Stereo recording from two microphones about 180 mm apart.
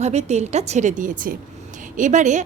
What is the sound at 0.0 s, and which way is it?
A woman's voice, 35° right (ahead or behind).